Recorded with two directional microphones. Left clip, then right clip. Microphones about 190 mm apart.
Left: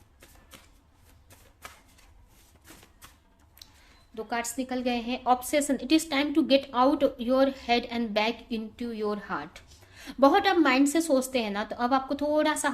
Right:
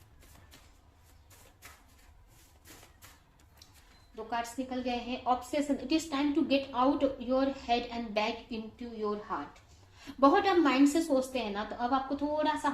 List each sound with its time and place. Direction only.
4.1 s a woman's voice: 45° left (ahead or behind)